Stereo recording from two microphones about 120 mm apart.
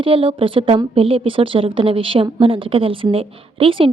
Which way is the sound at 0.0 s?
50° right (ahead or behind).